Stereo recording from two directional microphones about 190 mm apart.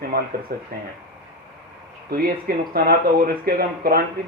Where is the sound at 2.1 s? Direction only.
50° right (ahead or behind).